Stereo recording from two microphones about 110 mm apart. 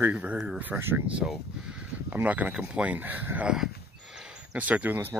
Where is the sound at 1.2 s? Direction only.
10° right (ahead or behind).